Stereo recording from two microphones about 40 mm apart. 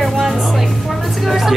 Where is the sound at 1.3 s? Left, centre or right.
Centre.